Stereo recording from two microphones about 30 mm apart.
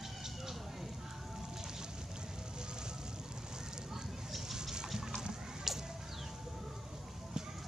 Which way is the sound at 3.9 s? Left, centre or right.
Centre.